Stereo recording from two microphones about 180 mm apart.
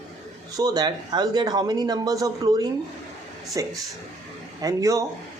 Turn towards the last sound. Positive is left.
turn(degrees=-15)  # may be behind; listen again after turning